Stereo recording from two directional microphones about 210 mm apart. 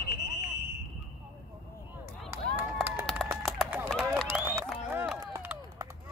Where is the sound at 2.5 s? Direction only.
10° right (ahead or behind).